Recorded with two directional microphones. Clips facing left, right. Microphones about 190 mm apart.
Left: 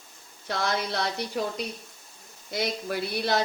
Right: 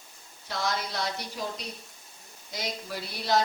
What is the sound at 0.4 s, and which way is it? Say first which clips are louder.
Speech: left 3 dB; 60° left (ahead or behind).